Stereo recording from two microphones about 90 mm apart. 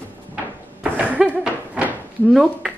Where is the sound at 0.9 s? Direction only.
15° right (ahead or behind).